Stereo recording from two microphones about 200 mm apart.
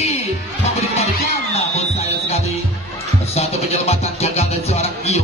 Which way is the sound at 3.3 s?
30° left (ahead or behind).